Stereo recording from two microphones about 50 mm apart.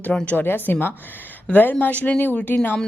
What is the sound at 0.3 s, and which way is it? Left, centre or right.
Speech, left.